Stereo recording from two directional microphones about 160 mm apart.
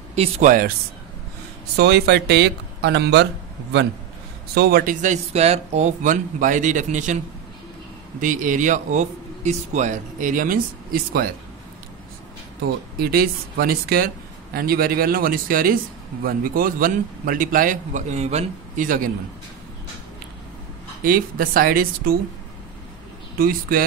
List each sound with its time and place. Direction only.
0.1 s speech: 40° right (ahead or behind)
0.5 s a man's voice: 60° right (ahead or behind)
1.8 s speech: 90° right
4.6 s speech: 70° right (ahead or behind)
5.0 s a man's voice: 45° right (ahead or behind)
8.2 s a man's voice: 55° right (ahead or behind)
13.0 s a man's voice: 70° right (ahead or behind)
21.0 s a man's voice: 65° right (ahead or behind)
23.3 s a man's voice: 65° right (ahead or behind)